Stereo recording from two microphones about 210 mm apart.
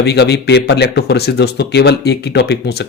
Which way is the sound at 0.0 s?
50° left (ahead or behind).